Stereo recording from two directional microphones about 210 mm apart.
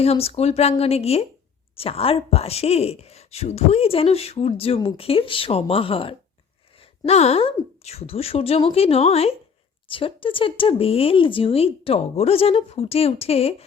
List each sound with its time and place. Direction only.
0.0 s speech: 30° left (ahead or behind)